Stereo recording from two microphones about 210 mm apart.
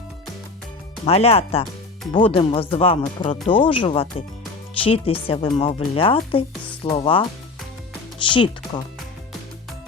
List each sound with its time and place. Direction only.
1.0 s speech: 30° left (ahead or behind)